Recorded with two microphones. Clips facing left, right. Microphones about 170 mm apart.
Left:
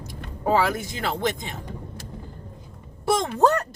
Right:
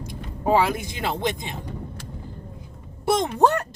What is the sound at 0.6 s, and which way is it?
Speech, 20° right (ahead or behind).